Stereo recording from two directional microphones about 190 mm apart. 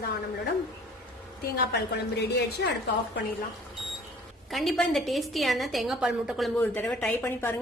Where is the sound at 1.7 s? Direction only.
60° left (ahead or behind).